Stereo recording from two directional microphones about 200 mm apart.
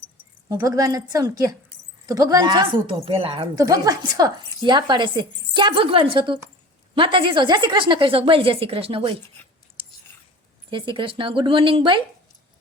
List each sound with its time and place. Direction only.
0.4 s a woman's voice: 15° right (ahead or behind)
10.7 s speech: 25° right (ahead or behind)